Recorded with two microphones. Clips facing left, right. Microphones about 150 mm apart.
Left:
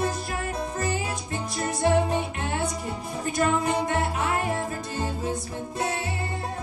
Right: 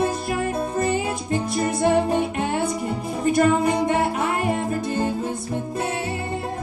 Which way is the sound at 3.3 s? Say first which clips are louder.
Right 4 dB; 60° right (ahead or behind).